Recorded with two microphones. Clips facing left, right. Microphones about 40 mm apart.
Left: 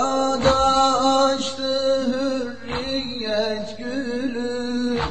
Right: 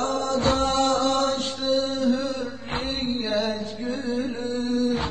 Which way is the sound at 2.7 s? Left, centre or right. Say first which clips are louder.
Left 2 dB; centre.